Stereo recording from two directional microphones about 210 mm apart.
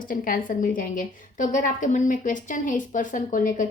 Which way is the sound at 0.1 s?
40° left (ahead or behind).